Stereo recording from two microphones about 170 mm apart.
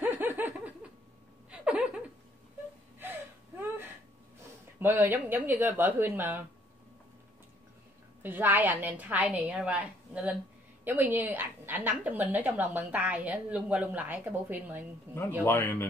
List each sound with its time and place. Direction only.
0.0 s a sound: 10° right (ahead or behind)
3.0 s wheeze: 10° right (ahead or behind)
4.7 s a woman's voice: 15° right (ahead or behind)
8.2 s a woman's voice: 10° right (ahead or behind)
15.4 s speech: 10° left (ahead or behind)